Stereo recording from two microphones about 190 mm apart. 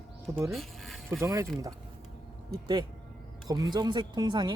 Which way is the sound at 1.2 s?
15° right (ahead or behind).